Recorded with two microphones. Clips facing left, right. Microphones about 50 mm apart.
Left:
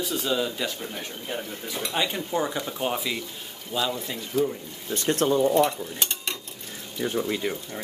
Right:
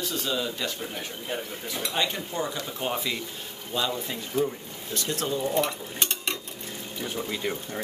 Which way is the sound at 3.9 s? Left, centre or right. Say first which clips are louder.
Left 1 dB; centre.